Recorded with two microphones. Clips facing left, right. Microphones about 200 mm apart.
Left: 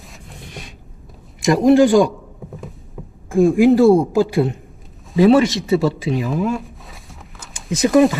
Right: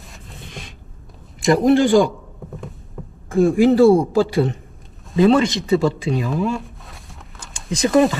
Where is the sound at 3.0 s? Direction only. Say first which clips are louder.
Even; 5° left (ahead or behind).